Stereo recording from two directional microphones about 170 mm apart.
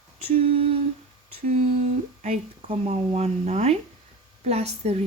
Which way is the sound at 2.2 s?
40° right (ahead or behind).